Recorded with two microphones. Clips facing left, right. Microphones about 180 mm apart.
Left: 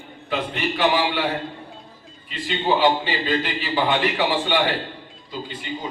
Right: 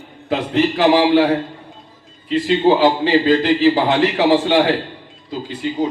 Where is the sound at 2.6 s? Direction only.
40° right (ahead or behind).